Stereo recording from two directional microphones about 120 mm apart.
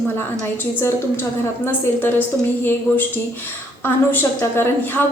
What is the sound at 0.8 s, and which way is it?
A woman's voice, 20° left (ahead or behind).